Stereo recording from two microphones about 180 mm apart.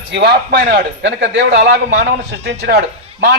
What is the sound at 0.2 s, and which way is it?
Speech, 60° right (ahead or behind).